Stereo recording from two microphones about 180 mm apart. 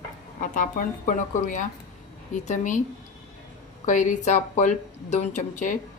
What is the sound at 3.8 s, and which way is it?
Speech, 45° left (ahead or behind).